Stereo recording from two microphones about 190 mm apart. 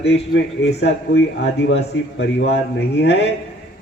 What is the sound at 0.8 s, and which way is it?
Speech, 75° left (ahead or behind).